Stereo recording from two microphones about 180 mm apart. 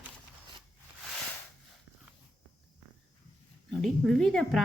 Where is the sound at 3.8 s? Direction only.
Centre (ahead or behind).